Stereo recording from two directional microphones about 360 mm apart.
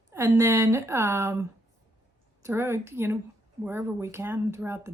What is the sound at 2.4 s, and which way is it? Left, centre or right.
Speech, centre.